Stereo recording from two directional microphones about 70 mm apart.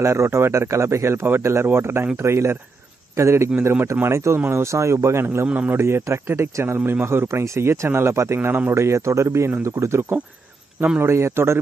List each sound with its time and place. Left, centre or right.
0.0 s speech: right
8.4 s speech: right